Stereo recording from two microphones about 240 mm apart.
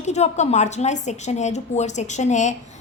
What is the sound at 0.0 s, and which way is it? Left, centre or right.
A woman's voice, left.